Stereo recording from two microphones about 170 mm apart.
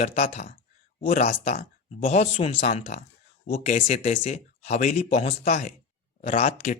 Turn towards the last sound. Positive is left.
turn(degrees=40)  # may be behind; listen again after turning